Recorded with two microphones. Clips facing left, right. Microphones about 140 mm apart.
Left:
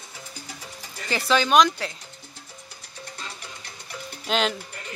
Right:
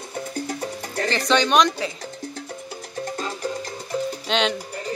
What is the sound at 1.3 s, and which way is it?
Speech, 5° left (ahead or behind).